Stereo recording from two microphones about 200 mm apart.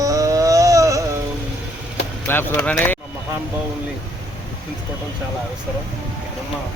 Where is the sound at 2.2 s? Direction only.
10° left (ahead or behind).